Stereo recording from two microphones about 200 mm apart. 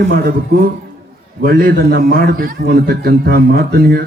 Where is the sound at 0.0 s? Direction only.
55° right (ahead or behind).